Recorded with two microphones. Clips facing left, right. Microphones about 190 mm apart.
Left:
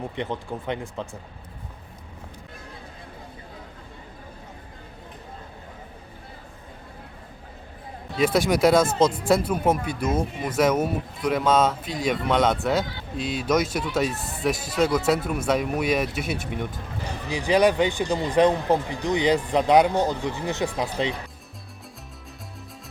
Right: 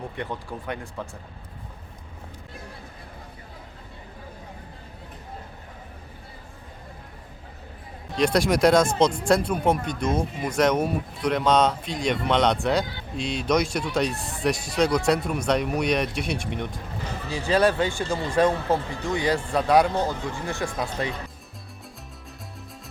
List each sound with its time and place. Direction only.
0.2 s speech: 20° left (ahead or behind)
8.1 s speech: 5° left (ahead or behind)
17.2 s speech: 15° left (ahead or behind)